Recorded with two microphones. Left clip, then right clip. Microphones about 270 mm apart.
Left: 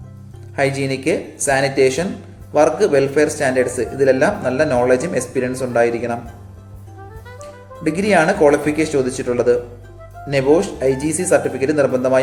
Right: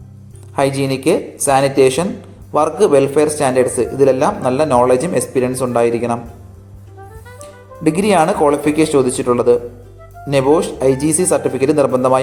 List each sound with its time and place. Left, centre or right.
0.5 s a man's voice: centre
7.4 s a man's voice: centre